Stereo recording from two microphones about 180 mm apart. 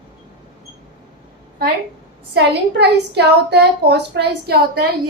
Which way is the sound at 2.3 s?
65° right (ahead or behind).